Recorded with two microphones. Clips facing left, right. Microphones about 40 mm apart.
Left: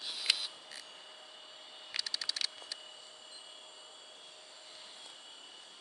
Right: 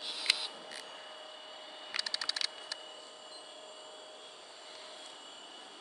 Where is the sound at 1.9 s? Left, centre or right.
Right.